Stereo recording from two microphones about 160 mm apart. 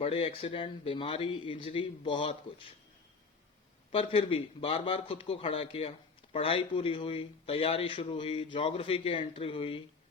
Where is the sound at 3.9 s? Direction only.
35° left (ahead or behind).